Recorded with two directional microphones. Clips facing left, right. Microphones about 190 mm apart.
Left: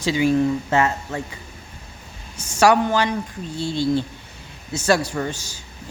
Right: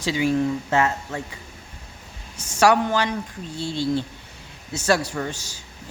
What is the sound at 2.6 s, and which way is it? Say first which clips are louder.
Speech: left 2 dB; 15° left (ahead or behind).